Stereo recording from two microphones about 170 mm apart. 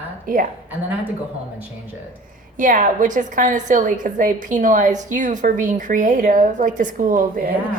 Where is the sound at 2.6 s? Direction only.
50° right (ahead or behind).